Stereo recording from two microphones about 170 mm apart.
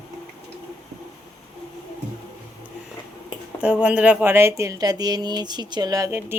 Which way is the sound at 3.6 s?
5° right (ahead or behind).